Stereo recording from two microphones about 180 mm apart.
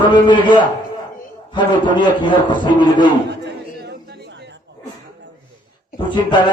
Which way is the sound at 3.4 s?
70° right (ahead or behind).